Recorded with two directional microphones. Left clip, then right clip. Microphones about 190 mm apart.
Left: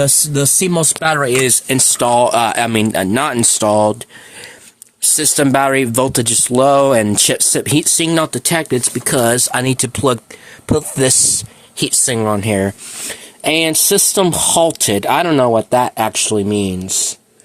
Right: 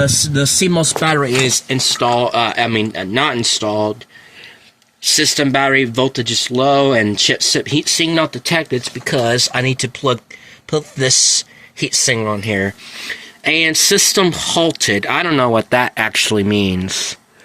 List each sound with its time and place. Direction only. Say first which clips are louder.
0.7 s speech: even; 15° left (ahead or behind)
1.3 s speech: left 1 dB; 35° left (ahead or behind); by 3.9 s 50° left (ahead or behind)
5.1 s speech: even; 35° left (ahead or behind); by 16.9 s centre (ahead or behind)